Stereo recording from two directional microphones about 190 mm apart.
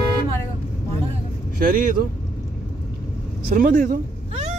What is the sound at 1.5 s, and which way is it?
Speech, 45° right (ahead or behind).